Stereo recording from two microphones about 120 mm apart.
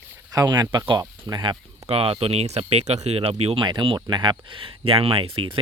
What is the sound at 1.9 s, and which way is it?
Speech, 50° right (ahead or behind).